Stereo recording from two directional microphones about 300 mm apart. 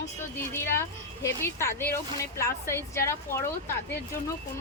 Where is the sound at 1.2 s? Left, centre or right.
Centre.